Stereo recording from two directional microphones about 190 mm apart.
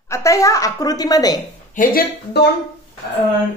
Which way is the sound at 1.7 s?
50° left (ahead or behind).